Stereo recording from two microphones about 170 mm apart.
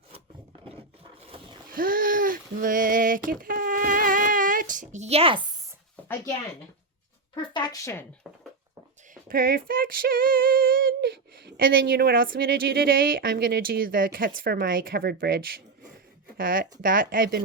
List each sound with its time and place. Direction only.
1.7 s a sound: 55° right (ahead or behind); by 5.5 s 30° right (ahead or behind)
7.5 s speech: 25° left (ahead or behind)
9.3 s a woman's voice: 55° right (ahead or behind)